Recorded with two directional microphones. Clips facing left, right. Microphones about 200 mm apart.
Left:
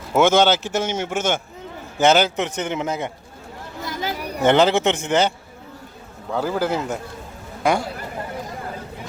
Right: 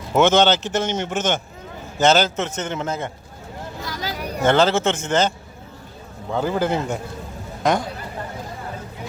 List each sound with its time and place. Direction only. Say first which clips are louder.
0.1 s a man's voice: even; 10° left (ahead or behind)
3.8 s a sound: left 3 dB; 20° left (ahead or behind)
4.4 s a man's voice: left 1 dB; 15° left (ahead or behind)
6.3 s a man's voice: right 1 dB; 5° left (ahead or behind)